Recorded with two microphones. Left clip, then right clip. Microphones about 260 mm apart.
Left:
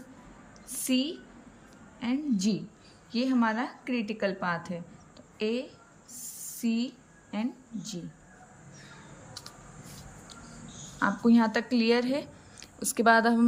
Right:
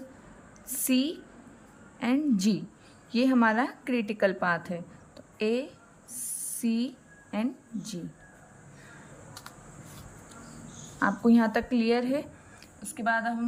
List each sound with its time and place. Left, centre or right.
0.7 s a woman's voice: centre
6.2 s a sound: centre
11.0 s speech: centre
12.8 s speech: centre